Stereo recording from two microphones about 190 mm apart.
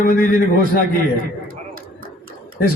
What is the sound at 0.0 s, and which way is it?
Speech, 50° left (ahead or behind).